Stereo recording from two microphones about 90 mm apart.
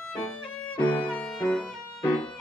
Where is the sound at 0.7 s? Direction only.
15° left (ahead or behind).